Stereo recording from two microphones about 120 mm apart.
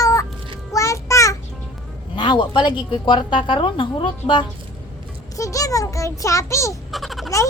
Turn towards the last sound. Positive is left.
turn(degrees=0)  # may be behind; listen again after turning